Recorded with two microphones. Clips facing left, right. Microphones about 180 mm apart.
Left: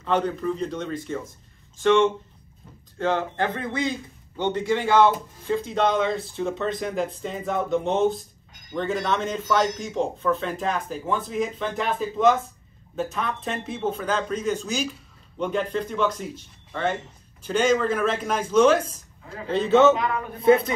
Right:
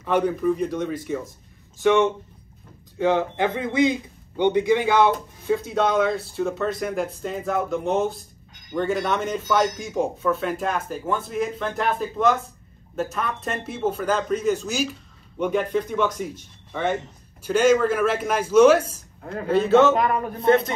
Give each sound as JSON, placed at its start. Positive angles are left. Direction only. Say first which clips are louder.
{"t": 0.0, "sound": "a man's voice", "louder": "right 3 dB", "side_deg": -10}
{"t": 17.4, "sound": "speech", "louder": "right 3 dB", "side_deg": -5}